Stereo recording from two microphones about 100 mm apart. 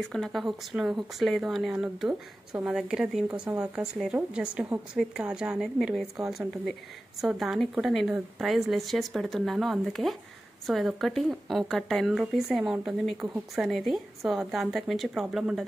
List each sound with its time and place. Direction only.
0.0 s speech: 5° left (ahead or behind)
3.3 s speech: 35° right (ahead or behind)
3.7 s a woman's voice: 10° right (ahead or behind)